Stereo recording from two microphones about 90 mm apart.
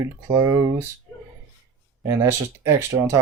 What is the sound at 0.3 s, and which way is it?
Speech, 40° right (ahead or behind).